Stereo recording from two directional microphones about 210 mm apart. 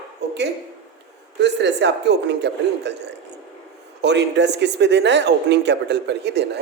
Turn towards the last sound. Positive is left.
turn(degrees=-55)  # may be behind; listen again after turning